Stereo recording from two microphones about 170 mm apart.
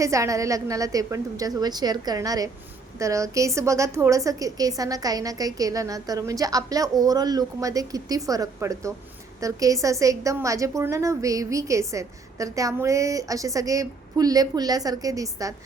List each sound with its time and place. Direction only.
0.0 s a woman's voice: 20° right (ahead or behind)